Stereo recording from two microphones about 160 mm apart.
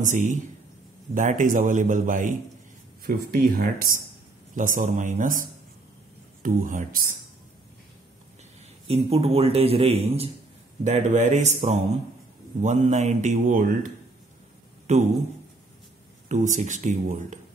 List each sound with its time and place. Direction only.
0.0 s a man's voice: 50° right (ahead or behind)
3.0 s a man's voice: 65° right (ahead or behind)
8.8 s a man's voice: 40° right (ahead or behind)
14.9 s speech: 45° right (ahead or behind)
16.3 s a man's voice: 50° right (ahead or behind)